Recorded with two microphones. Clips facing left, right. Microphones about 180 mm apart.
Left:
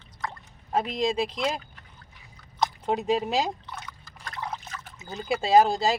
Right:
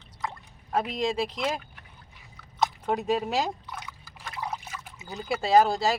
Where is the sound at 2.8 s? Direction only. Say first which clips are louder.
Left 3 dB; 20° left (ahead or behind).